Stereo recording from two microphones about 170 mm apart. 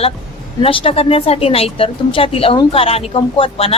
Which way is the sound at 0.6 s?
30° left (ahead or behind).